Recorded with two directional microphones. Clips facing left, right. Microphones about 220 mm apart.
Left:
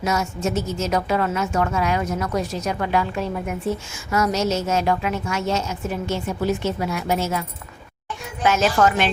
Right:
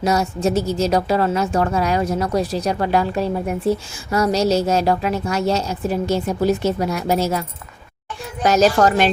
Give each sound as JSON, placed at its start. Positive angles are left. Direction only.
{"t": 0.0, "sound": "a woman's voice", "side_deg": -35}
{"t": 8.4, "sound": "a woman's voice", "side_deg": -40}